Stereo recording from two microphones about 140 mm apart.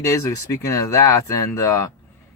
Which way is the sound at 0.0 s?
20° left (ahead or behind).